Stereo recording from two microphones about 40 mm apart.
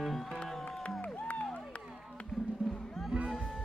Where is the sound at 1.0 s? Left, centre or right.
Left.